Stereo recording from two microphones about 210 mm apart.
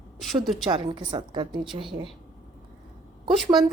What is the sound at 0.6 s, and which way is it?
A woman's voice, 20° right (ahead or behind).